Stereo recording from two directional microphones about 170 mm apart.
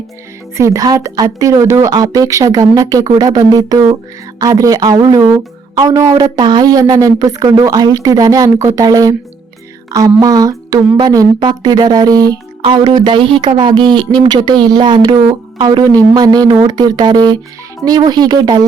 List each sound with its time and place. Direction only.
0.5 s speech: 20° right (ahead or behind)
10.2 s speech: 20° right (ahead or behind)